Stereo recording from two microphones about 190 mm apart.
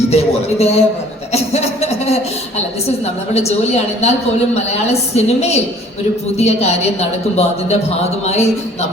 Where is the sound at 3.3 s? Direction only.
35° left (ahead or behind).